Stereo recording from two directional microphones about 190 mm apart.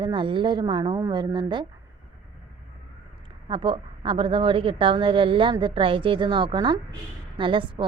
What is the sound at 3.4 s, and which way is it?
A woman's voice, 25° right (ahead or behind).